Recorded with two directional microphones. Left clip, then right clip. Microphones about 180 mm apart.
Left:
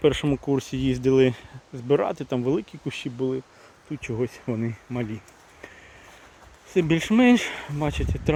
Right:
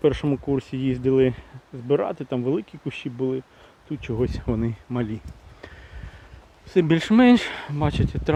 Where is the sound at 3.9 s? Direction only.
20° right (ahead or behind).